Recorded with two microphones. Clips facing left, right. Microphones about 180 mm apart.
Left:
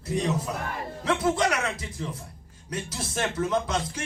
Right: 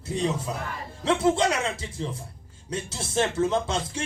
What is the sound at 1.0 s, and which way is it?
Speech, 25° right (ahead or behind).